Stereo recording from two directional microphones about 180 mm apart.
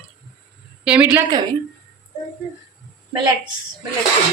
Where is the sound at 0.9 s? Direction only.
5° right (ahead or behind).